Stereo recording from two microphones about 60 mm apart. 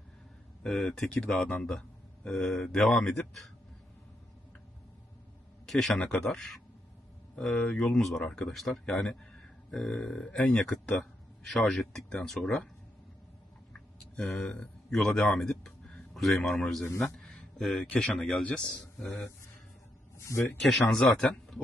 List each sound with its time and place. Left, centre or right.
0.7 s speech: centre
5.7 s speech: centre
5.9 s speech: centre
6.2 s speech: centre
8.5 s speech: centre
13.7 s a sound: centre
17.2 s speech: centre
18.4 s a man's voice: centre
20.2 s speech: left
20.5 s speech: centre